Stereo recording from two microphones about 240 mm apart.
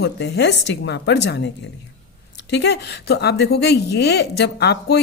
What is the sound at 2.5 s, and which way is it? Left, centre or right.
A woman's voice, left.